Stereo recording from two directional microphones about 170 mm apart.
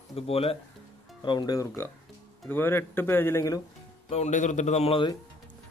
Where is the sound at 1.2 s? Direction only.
25° left (ahead or behind).